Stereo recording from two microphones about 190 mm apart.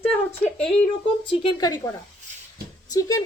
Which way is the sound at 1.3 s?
25° left (ahead or behind).